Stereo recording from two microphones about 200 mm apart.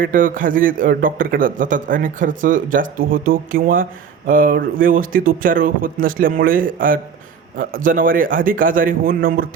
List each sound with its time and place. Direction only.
0.0 s a man's voice: 45° right (ahead or behind)